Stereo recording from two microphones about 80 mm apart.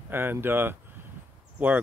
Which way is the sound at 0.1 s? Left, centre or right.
Right.